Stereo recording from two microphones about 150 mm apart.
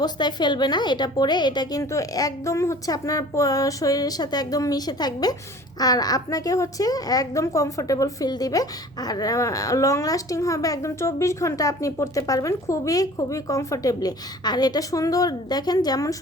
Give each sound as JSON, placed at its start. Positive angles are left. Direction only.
{"t": 0.0, "sound": "a woman's voice", "side_deg": 30}